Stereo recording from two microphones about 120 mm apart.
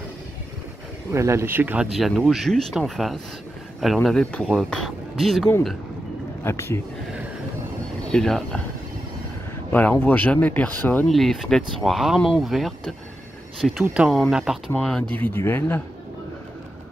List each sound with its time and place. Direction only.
1.1 s speech: 25° right (ahead or behind)
1.9 s speech: centre (ahead or behind)
6.4 s speech: 20° left (ahead or behind)
8.1 s speech: 5° left (ahead or behind)
9.7 s speech: 15° left (ahead or behind)
11.1 s speech: centre (ahead or behind)
14.7 s speech: 5° left (ahead or behind)
15.1 s speech: 15° left (ahead or behind)